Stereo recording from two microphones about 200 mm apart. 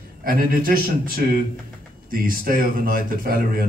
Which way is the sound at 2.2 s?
45° right (ahead or behind).